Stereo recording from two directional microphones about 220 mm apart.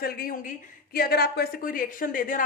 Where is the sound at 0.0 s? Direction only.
40° left (ahead or behind).